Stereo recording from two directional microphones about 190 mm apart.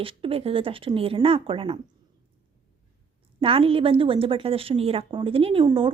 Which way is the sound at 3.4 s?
30° right (ahead or behind).